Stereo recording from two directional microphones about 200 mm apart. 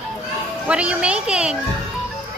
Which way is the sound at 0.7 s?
5° right (ahead or behind).